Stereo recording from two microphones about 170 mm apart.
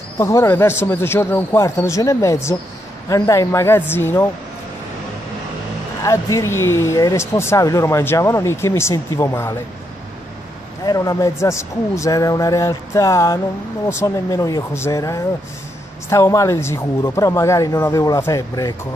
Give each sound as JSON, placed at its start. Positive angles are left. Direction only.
{"t": 0.2, "sound": "speech", "side_deg": 15}
{"t": 6.0, "sound": "speech", "side_deg": 15}
{"t": 10.9, "sound": "speech", "side_deg": 20}